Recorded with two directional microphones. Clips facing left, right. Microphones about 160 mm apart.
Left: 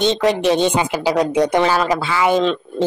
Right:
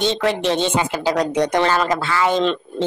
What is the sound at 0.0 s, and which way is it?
A woman's voice, 15° left (ahead or behind).